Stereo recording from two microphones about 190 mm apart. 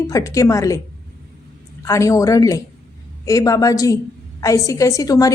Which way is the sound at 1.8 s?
15° left (ahead or behind).